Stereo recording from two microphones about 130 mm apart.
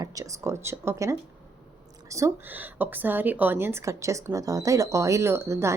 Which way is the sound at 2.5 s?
15° right (ahead or behind).